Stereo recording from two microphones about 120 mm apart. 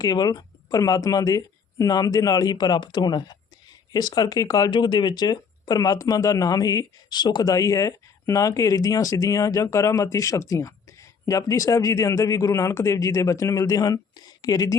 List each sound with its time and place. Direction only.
0.0 s speech: 30° left (ahead or behind)